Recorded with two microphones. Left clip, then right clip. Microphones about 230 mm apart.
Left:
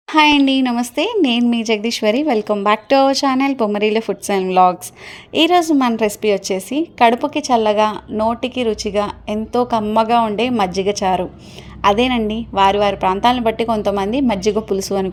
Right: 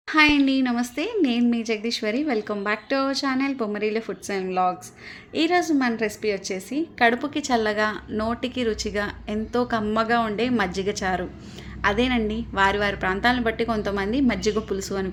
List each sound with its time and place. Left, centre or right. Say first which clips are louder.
0.1 s a woman's voice: left 6 dB; left